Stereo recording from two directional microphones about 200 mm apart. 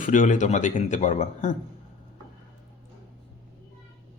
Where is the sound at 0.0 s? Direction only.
40° left (ahead or behind).